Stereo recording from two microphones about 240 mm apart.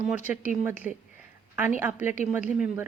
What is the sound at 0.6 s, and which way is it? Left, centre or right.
Speech, centre.